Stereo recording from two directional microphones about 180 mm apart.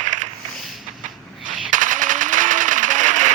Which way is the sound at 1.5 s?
45° right (ahead or behind).